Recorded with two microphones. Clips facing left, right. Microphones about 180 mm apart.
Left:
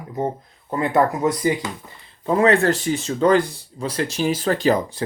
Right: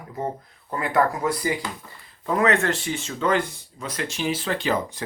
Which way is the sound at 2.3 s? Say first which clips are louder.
Left 5 dB; 30° left (ahead or behind).